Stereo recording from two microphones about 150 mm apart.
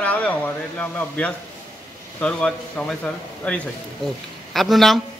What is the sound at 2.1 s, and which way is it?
A man's voice, 5° left (ahead or behind).